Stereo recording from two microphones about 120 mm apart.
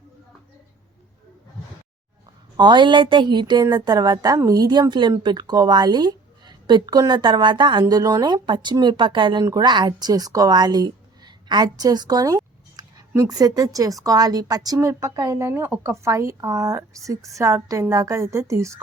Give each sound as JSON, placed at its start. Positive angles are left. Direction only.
{"t": 2.6, "sound": "a woman's voice", "side_deg": -40}